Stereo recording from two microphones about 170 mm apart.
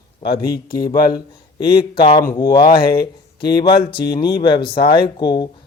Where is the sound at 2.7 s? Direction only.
65° left (ahead or behind).